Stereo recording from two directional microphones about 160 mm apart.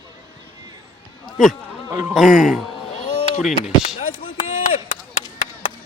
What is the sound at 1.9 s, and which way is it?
Speech, 20° right (ahead or behind).